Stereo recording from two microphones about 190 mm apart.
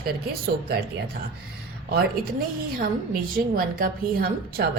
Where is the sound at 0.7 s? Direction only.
60° right (ahead or behind).